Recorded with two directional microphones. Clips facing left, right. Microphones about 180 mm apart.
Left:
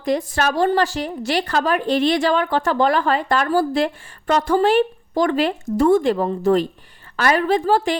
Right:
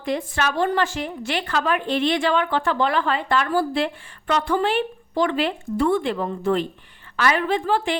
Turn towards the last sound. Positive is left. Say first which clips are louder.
# left 4 dB
turn(degrees=40)  # may be behind; listen again after turning